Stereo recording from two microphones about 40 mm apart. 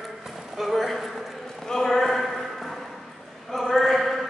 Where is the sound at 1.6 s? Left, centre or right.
Centre.